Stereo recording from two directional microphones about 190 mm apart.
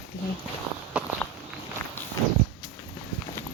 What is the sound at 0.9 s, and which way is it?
Walk, 5° right (ahead or behind).